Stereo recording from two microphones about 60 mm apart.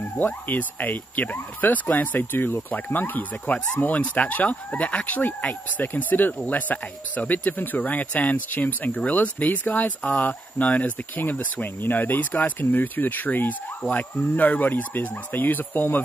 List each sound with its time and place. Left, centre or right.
0.2 s speech: left